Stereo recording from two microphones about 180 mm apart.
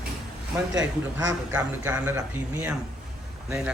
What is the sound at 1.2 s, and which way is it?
A man's voice, 20° right (ahead or behind).